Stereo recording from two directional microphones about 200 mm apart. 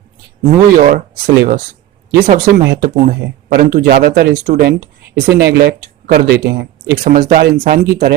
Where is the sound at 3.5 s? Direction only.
50° right (ahead or behind).